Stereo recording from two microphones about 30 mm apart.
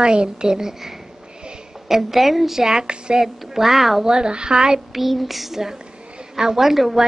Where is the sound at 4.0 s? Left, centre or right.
Right.